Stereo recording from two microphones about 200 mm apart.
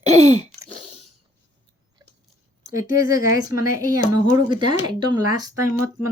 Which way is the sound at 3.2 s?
15° right (ahead or behind).